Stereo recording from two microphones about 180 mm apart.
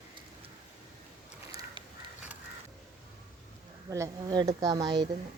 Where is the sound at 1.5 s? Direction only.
20° right (ahead or behind).